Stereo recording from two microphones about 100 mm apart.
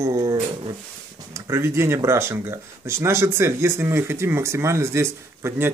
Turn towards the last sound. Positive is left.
turn(degrees=-25)  # may be behind; listen again after turning